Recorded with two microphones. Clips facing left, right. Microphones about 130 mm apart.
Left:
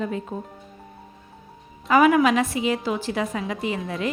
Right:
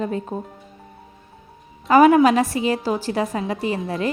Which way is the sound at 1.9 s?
35° right (ahead or behind).